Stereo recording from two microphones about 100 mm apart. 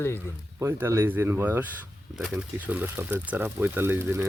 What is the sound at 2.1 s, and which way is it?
Speech, 10° right (ahead or behind).